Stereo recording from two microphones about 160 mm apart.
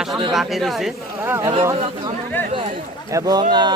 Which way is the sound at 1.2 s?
15° right (ahead or behind).